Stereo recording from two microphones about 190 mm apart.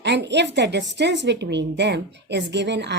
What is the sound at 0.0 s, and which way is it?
A woman's voice, 60° right (ahead or behind).